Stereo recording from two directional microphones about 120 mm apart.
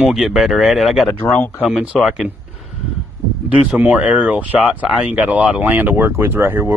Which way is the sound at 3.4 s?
10° right (ahead or behind).